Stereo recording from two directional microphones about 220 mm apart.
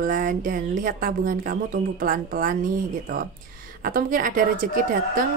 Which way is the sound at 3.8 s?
40° right (ahead or behind).